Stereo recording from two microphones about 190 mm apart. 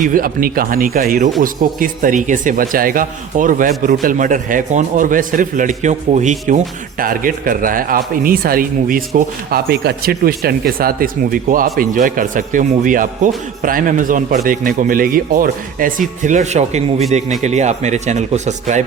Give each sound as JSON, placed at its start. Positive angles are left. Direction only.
{"t": 0.1, "sound": "speech", "side_deg": -45}